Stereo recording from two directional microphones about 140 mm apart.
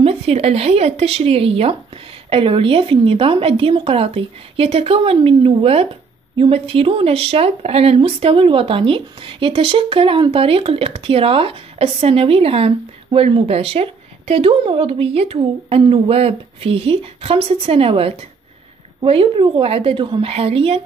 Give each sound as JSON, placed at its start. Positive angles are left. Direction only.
{"t": 0.0, "sound": "a woman's voice", "side_deg": -45}